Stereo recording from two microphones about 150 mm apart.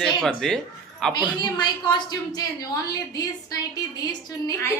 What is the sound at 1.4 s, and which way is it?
A woman's voice, 30° left (ahead or behind).